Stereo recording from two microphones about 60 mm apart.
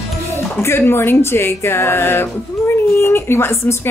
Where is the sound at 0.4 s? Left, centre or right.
Left.